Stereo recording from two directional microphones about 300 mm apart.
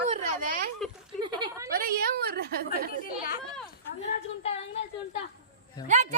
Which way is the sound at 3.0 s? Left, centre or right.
Left.